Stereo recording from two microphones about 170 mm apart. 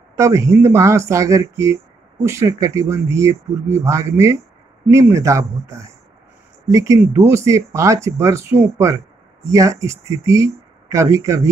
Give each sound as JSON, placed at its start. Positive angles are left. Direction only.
{"t": 0.2, "sound": "speech", "side_deg": -15}